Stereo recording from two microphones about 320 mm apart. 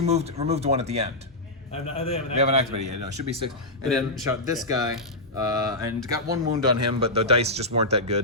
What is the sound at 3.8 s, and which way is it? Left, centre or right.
Speech, centre.